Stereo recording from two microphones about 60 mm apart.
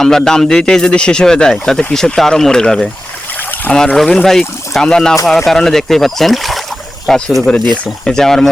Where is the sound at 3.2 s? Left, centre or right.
Left.